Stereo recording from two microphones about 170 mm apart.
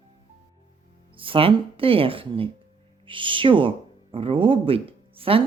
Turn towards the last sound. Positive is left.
turn(degrees=-35)  # may be behind; listen again after turning